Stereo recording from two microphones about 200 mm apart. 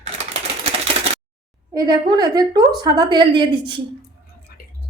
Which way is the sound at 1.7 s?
20° right (ahead or behind).